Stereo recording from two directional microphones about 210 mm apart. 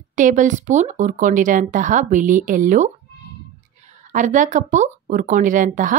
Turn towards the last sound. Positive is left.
turn(degrees=-40)  # may be behind; listen again after turning